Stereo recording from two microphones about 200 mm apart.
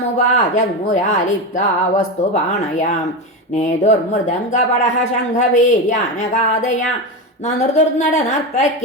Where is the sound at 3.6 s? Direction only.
35° left (ahead or behind).